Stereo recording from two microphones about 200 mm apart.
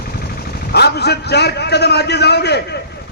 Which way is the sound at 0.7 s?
55° left (ahead or behind).